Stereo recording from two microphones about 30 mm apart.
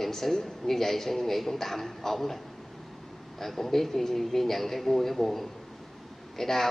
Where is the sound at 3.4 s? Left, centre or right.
Centre.